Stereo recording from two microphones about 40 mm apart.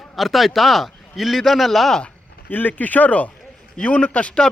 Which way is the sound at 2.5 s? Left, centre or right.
Left.